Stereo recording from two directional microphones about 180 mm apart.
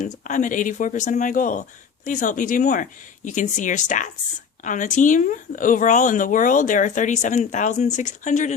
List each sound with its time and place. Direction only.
0.0 s speech: 45° left (ahead or behind)